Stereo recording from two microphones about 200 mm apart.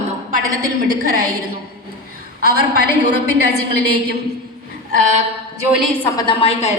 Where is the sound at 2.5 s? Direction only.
50° right (ahead or behind).